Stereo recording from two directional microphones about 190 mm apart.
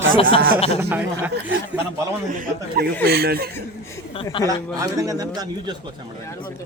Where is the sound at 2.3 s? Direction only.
50° right (ahead or behind).